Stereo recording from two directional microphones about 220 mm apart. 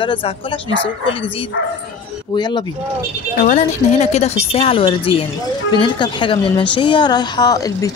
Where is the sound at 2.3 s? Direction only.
20° left (ahead or behind).